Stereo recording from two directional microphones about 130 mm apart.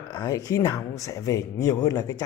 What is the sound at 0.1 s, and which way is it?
Speech, 30° left (ahead or behind).